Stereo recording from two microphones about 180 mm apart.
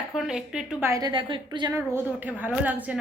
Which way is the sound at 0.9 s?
20° right (ahead or behind).